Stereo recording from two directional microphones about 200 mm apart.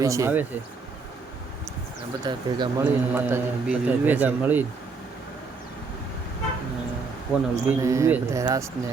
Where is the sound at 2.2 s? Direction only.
20° right (ahead or behind).